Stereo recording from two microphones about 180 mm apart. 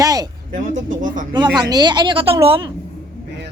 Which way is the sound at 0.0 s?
20° right (ahead or behind).